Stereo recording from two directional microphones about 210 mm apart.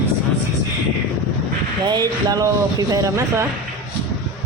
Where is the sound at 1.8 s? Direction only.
20° right (ahead or behind).